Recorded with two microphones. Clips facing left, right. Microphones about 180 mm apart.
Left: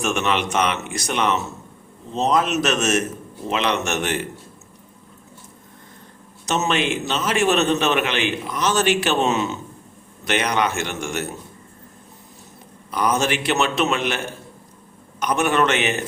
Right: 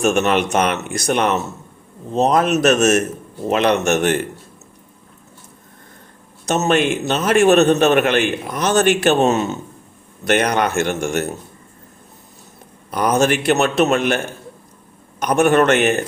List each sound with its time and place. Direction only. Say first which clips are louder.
0.0 s a man's voice: right 6 dB; 45° right (ahead or behind)
6.5 s a man's voice: right 5 dB; 50° right (ahead or behind)
13.1 s a man's voice: right 6 dB; 45° right (ahead or behind)
15.2 s a man's voice: right 5 dB; 50° right (ahead or behind)